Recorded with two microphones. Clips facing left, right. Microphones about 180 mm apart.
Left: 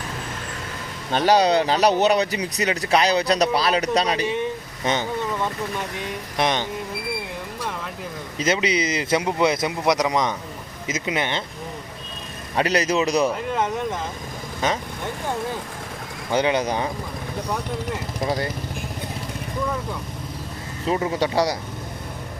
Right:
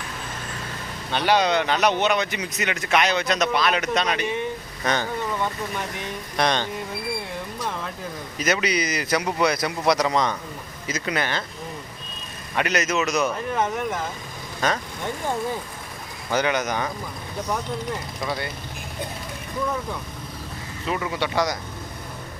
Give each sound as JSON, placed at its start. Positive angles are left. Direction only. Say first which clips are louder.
{"t": 1.1, "sound": "a man's voice", "louder": "left 3 dB", "side_deg": 40}
{"t": 4.8, "sound": "speech", "louder": "left 1 dB", "side_deg": 25}
{"t": 6.3, "sound": "speech", "louder": "even", "side_deg": 20}
{"t": 8.4, "sound": "speech", "louder": "left 2 dB", "side_deg": 25}
{"t": 12.5, "sound": "a man's voice", "louder": "left 3 dB", "side_deg": 30}
{"t": 14.6, "sound": "speech", "louder": "left 1 dB", "side_deg": 20}
{"t": 16.3, "sound": "speech", "louder": "left 2 dB", "side_deg": 25}
{"t": 18.2, "sound": "a man's voice", "louder": "left 7 dB", "side_deg": 40}
{"t": 20.8, "sound": "a man's voice", "louder": "left 4 dB", "side_deg": 35}